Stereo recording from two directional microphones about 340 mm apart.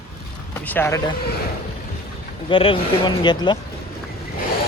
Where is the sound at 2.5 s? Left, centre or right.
Centre.